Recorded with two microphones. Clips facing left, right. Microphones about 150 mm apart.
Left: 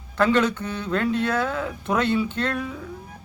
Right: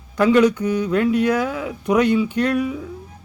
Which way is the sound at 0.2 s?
10° right (ahead or behind).